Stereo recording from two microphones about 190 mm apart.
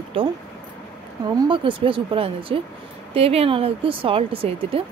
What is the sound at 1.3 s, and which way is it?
Speech, 25° right (ahead or behind).